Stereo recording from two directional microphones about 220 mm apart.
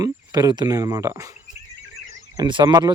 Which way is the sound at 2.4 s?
20° right (ahead or behind).